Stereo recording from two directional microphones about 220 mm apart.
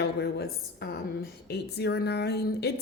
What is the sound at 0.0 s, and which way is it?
Speech, 50° left (ahead or behind).